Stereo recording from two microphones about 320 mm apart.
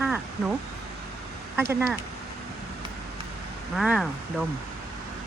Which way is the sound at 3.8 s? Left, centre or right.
Centre.